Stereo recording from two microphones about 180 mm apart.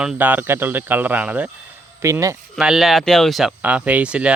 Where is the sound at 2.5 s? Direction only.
Centre (ahead or behind).